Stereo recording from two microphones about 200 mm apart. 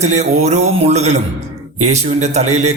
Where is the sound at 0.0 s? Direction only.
35° right (ahead or behind).